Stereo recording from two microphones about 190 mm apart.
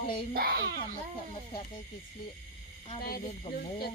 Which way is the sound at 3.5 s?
35° left (ahead or behind).